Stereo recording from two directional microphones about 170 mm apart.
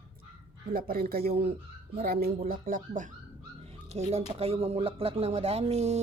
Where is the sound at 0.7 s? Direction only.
60° right (ahead or behind).